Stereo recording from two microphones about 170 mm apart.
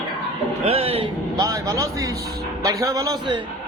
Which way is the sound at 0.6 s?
35° right (ahead or behind).